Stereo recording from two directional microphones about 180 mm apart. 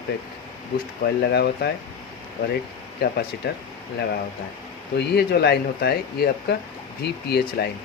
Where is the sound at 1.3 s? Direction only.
65° left (ahead or behind).